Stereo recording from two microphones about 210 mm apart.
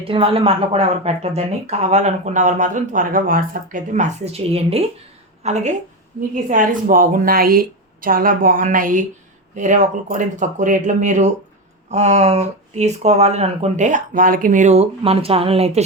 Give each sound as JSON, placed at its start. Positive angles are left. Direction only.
{"t": 0.0, "sound": "a woman's voice", "side_deg": -25}